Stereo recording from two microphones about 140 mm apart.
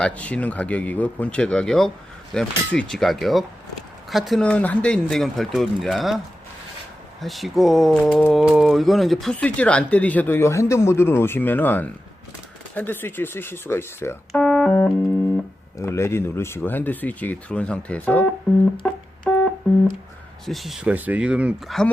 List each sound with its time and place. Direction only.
0.0 s speech: 10° left (ahead or behind)
7.2 s speech: centre (ahead or behind); by 14.4 s 15° left (ahead or behind)
14.4 s keyboard: 5° left (ahead or behind)
15.8 s speech: 20° left (ahead or behind)
18.8 s music: 5° left (ahead or behind)
19.3 s telephone dialing: 10° left (ahead or behind)
20.4 s speech: centre (ahead or behind)